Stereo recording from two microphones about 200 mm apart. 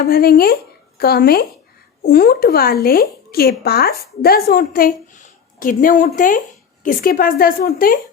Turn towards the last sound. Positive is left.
turn(degrees=45)  # may be behind; listen again after turning